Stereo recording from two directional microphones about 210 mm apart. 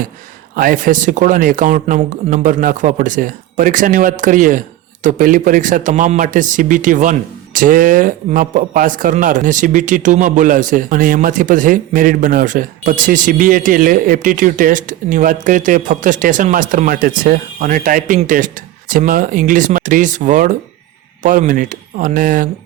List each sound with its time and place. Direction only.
0.5 s a man's voice: 40° right (ahead or behind)